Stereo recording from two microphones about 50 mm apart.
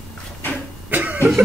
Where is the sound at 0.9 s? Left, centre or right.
Right.